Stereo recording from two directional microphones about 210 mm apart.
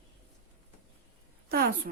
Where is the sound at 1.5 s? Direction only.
45° right (ahead or behind).